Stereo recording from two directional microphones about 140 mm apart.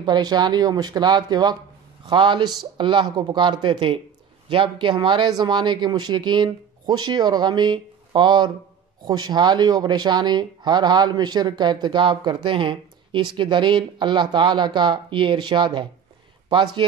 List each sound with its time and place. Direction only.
0.0 s a man's voice: 30° right (ahead or behind)